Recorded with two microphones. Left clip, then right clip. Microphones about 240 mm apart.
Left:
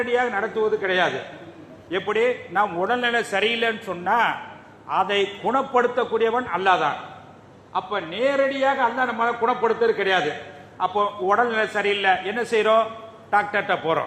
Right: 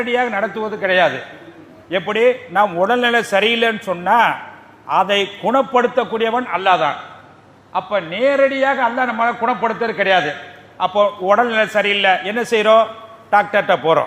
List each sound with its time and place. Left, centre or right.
0.0 s a man's voice: right